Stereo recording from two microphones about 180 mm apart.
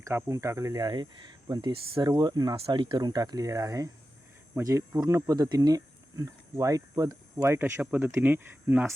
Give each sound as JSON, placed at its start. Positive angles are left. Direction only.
{"t": 0.0, "sound": "speech", "side_deg": -15}